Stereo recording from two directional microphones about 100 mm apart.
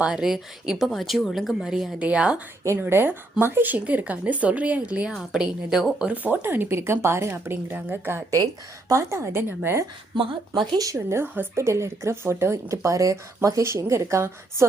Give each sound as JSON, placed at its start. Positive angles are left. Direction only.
{"t": 0.0, "sound": "speech", "side_deg": -5}
{"t": 2.6, "sound": "speech", "side_deg": -20}
{"t": 6.2, "sound": "speech", "side_deg": -20}
{"t": 8.9, "sound": "speech", "side_deg": -30}
{"t": 10.2, "sound": "speech", "side_deg": -55}
{"t": 10.8, "sound": "speech", "side_deg": -35}